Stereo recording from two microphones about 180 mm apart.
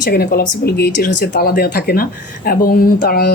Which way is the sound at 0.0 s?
60° left (ahead or behind).